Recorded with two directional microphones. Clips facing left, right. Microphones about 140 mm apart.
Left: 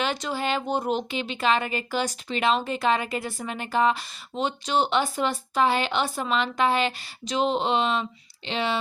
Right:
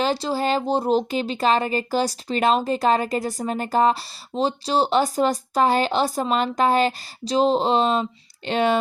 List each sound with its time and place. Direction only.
0.0 s speech: 35° right (ahead or behind)
8.4 s speech: 50° right (ahead or behind)